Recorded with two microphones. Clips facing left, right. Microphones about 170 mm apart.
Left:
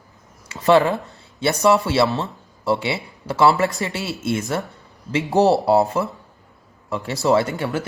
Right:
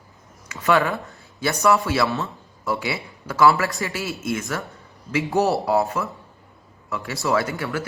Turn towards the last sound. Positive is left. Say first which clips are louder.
# left 3 dB
turn(degrees=25)  # may be behind; listen again after turning